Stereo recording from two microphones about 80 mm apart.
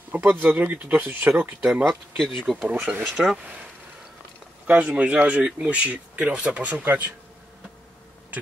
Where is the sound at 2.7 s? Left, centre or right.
Centre.